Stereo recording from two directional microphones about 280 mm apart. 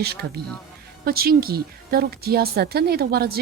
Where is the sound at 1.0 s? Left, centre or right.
Right.